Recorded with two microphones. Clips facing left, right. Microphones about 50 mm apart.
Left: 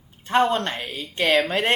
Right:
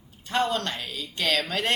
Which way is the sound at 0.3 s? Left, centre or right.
Left.